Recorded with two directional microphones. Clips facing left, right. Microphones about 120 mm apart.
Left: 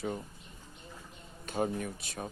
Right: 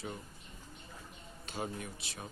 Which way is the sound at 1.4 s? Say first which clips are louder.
Left 8 dB; 50° left (ahead or behind).